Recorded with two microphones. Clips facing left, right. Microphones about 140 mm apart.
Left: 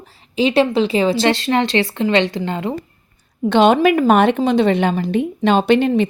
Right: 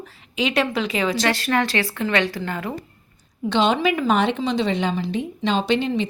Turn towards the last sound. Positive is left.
turn(degrees=55)  # may be behind; listen again after turning